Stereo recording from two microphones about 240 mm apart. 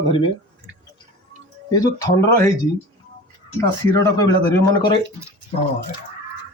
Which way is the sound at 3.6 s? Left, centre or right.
Centre.